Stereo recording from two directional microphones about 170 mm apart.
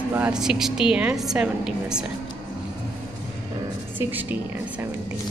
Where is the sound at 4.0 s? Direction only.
10° right (ahead or behind).